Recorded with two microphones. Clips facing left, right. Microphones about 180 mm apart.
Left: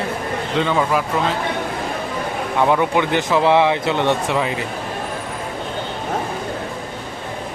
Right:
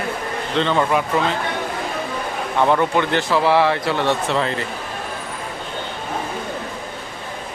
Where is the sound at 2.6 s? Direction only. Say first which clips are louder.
Even; 10° left (ahead or behind).